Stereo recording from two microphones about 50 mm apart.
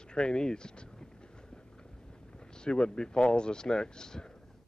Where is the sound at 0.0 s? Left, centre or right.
Centre.